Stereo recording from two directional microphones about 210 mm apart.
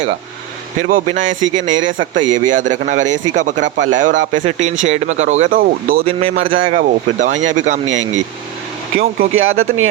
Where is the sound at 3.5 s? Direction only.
60° right (ahead or behind).